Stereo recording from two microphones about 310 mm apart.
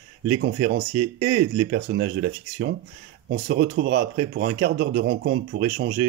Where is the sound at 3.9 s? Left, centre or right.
Right.